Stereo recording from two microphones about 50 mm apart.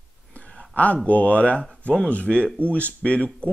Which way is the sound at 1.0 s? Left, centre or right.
Left.